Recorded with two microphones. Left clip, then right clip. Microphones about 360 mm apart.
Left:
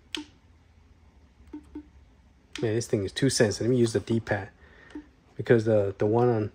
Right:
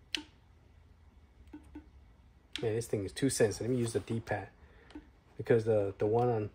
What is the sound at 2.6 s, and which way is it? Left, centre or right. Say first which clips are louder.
Speech: left 7 dB; left.